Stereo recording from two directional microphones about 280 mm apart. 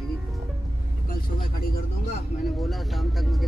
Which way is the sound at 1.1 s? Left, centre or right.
Left.